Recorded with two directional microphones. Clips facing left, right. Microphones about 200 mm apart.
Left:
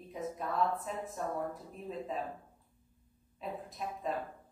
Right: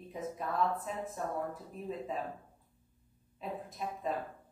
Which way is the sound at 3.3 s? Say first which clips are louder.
Even; centre (ahead or behind).